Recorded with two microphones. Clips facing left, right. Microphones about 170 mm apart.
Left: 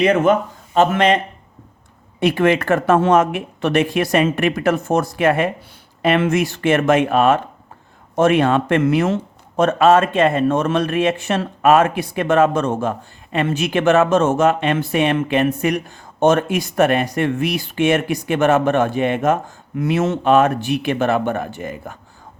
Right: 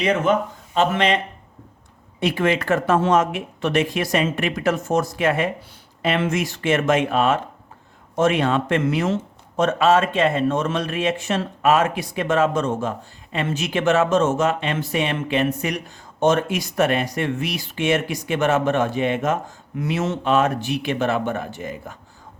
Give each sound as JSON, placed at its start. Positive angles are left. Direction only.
{"t": 0.0, "sound": "speech", "side_deg": 55}
{"t": 2.2, "sound": "speech", "side_deg": 55}